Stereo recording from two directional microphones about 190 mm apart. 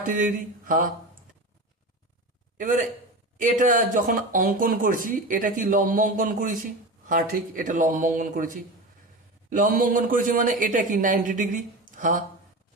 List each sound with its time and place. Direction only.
0.2 s speech: 45° right (ahead or behind)
2.6 s speech: 45° right (ahead or behind)